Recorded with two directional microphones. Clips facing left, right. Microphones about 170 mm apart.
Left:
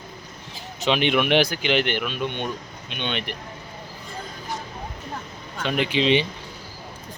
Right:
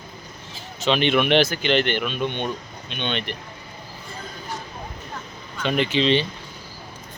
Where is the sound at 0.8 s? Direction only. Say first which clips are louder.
Right 1 dB; 10° left (ahead or behind).